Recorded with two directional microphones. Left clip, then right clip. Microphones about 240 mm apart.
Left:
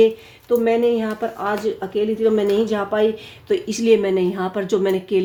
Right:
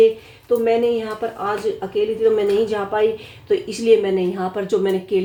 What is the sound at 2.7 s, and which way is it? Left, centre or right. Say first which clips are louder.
Speech: even; left.